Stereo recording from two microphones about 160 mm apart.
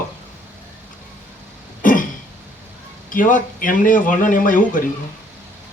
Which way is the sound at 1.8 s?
55° left (ahead or behind).